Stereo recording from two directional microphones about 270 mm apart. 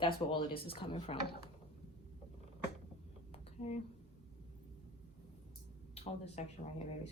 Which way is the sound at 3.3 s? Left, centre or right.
Left.